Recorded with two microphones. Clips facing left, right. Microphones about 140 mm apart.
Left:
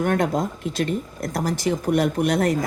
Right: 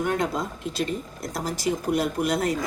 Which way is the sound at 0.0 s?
55° left (ahead or behind).